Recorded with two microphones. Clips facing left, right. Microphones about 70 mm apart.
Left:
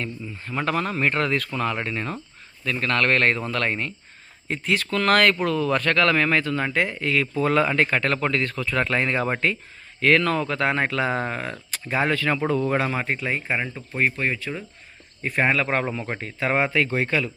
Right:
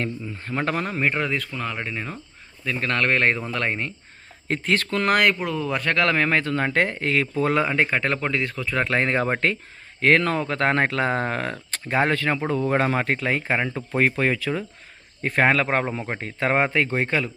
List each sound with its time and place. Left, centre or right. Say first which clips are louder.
0.4 s speech: left 1 dB; right
1.1 s speech: left 2 dB; centre
2.6 s speech: left 1 dB; right
4.4 s speech: right 2 dB; right
4.9 s speech: left 3 dB; right
5.1 s speech: left 2 dB; centre
8.9 s speech: right 1 dB; right
10.6 s speech: right 2 dB; right
11.3 s speech: right 3 dB; right
11.9 s speech: right 1 dB; right
13.1 s speech: right 3 dB; right
15.2 s speech: right 2 dB; right
15.7 s speech: right 1 dB; right
16.2 s speech: right 2 dB; right